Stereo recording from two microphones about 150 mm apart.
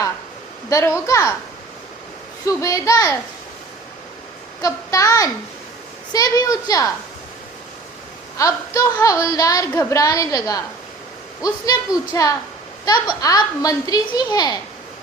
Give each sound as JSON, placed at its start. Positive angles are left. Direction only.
{"t": 0.7, "sound": "a woman's voice", "side_deg": 20}
{"t": 2.5, "sound": "a woman's voice", "side_deg": 20}
{"t": 4.6, "sound": "a woman's voice", "side_deg": 20}
{"t": 8.4, "sound": "a woman's voice", "side_deg": 20}